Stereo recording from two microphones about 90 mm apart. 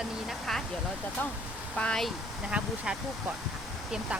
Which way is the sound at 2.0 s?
10° right (ahead or behind).